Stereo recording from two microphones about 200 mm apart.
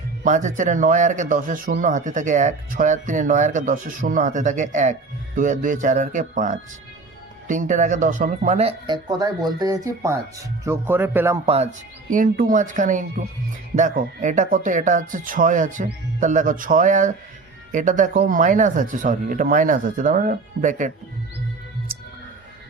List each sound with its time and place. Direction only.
0.3 s speech: 40° right (ahead or behind)
9.0 s speech: 20° right (ahead or behind)
11.4 s speech: 30° right (ahead or behind)
12.1 s speech: 40° right (ahead or behind)